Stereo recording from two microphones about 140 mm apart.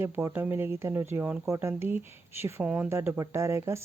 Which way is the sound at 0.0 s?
15° right (ahead or behind).